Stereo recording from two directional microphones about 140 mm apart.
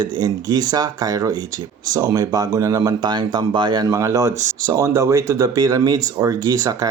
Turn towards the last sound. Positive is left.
turn(degrees=-25)  # may be behind; listen again after turning